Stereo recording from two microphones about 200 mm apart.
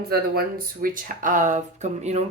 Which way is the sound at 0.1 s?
45° right (ahead or behind).